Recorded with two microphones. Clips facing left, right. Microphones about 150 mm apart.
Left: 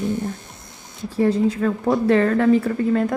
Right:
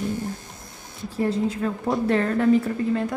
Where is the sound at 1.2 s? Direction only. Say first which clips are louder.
Left 5 dB; 90° left.